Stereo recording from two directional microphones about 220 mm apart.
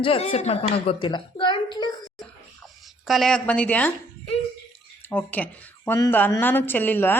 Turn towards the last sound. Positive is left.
turn(degrees=10)  # may be behind; listen again after turning